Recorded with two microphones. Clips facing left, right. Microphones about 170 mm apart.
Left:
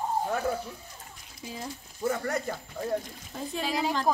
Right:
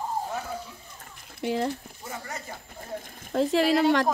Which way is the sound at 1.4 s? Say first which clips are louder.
Right 12 dB; 70° right (ahead or behind).